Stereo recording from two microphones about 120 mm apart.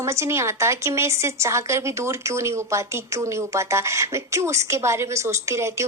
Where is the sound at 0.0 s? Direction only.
25° right (ahead or behind).